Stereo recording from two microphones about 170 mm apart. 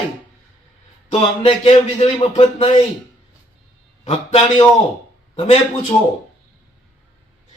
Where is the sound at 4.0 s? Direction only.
35° left (ahead or behind).